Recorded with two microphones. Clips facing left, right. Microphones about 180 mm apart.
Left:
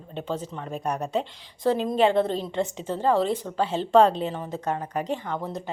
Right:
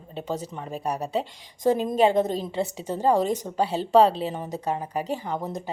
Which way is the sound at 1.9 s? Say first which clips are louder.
Even; 40° right (ahead or behind).